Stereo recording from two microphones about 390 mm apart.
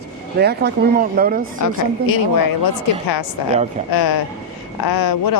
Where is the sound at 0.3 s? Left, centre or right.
Right.